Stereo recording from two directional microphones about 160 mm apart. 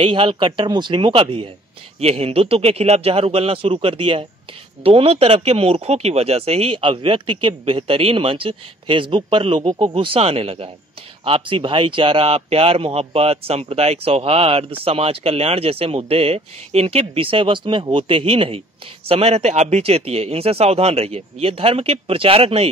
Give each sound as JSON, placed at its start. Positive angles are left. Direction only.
{"t": 0.0, "sound": "speech", "side_deg": -35}